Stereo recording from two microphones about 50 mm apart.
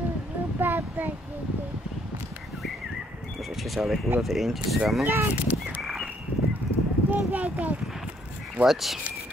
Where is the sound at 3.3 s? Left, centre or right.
Centre.